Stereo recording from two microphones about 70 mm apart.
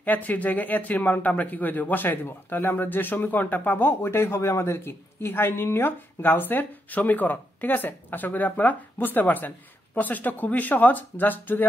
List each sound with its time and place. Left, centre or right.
0.0 s speech: left